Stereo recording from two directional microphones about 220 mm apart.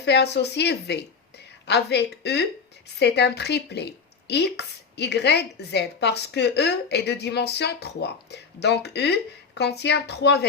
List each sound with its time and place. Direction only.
0.0 s a woman's voice: 50° left (ahead or behind)